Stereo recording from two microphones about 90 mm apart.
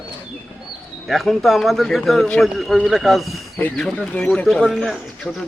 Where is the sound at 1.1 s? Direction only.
Centre (ahead or behind).